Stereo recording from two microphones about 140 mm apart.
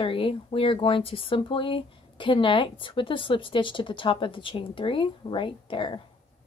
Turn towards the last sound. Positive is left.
turn(degrees=35)  # may be behind; listen again after turning